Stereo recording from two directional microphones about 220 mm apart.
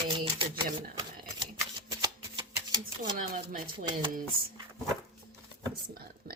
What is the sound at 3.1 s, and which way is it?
Speech, 40° right (ahead or behind).